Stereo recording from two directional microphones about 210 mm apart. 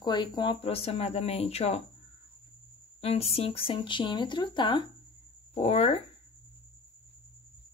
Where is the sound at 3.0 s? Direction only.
30° left (ahead or behind).